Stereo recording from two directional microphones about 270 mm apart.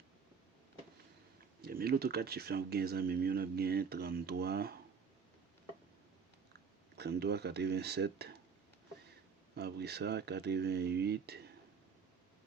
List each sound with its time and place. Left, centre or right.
1.6 s speech: right
6.9 s speech: right
9.6 s speech: right